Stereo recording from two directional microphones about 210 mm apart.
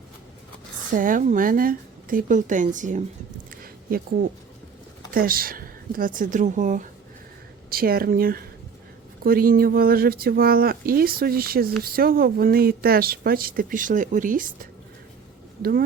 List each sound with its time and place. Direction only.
0.9 s speech: 40° right (ahead or behind)
3.6 s a sound: 45° right (ahead or behind)
5.1 s speech: 45° right (ahead or behind)